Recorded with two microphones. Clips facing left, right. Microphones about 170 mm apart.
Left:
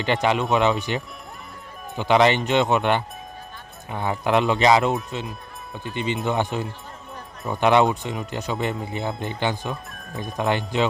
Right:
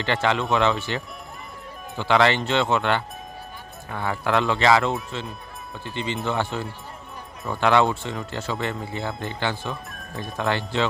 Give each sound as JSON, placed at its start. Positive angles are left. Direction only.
{"t": 0.0, "sound": "speech", "side_deg": 15}